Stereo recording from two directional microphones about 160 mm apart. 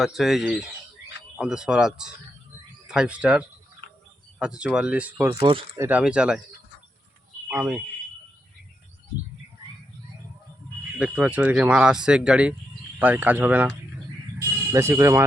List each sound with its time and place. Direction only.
0.0 s speech: centre (ahead or behind)
5.3 s speech: 20° right (ahead or behind)
6.0 s speech: 5° right (ahead or behind)
7.4 s speech: 5° right (ahead or behind)
10.9 s speech: 5° right (ahead or behind)